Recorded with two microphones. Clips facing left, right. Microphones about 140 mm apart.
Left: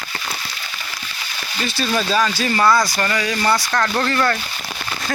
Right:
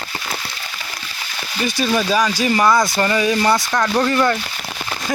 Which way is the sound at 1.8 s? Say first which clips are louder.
Right 1 dB; 15° right (ahead or behind).